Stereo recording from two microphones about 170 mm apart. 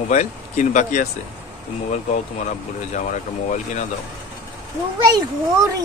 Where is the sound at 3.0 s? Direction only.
45° left (ahead or behind).